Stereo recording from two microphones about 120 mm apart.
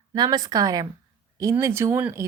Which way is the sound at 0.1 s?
35° right (ahead or behind).